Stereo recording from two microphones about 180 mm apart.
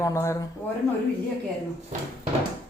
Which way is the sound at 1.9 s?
45° right (ahead or behind).